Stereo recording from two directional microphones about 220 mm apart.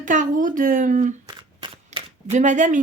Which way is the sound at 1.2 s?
20° right (ahead or behind).